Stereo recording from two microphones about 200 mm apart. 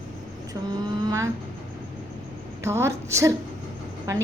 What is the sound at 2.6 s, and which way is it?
Speech, 15° right (ahead or behind).